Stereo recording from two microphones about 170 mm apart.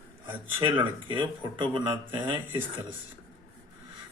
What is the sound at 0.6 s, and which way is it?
Speech, 30° right (ahead or behind).